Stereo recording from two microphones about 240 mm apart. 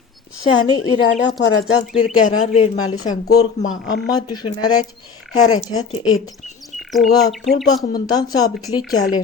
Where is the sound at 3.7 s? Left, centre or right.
Left.